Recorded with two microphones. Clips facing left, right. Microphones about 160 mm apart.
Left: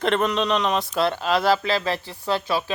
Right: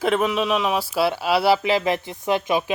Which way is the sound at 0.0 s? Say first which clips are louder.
Right 1 dB; 5° right (ahead or behind).